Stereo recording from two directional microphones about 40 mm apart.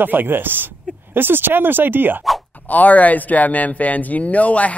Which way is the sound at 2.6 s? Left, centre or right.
Left.